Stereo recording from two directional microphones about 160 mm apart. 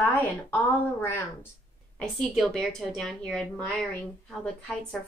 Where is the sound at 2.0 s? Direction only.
Centre (ahead or behind).